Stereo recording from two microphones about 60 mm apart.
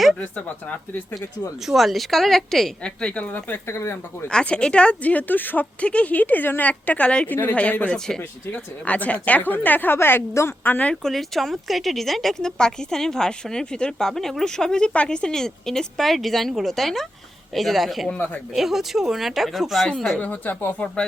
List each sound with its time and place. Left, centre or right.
0.2 s speech: left
1.6 s speech: centre
2.8 s speech: centre; by 4.3 s left
4.3 s speech: centre
7.9 s speech: centre
8.5 s a woman's voice: left
10.6 s a woman's voice: left
11.0 s speech: centre
20.1 s speech: left